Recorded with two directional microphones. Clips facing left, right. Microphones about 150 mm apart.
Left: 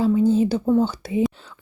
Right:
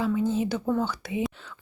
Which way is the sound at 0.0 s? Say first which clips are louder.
Left 8 dB; 35° left (ahead or behind).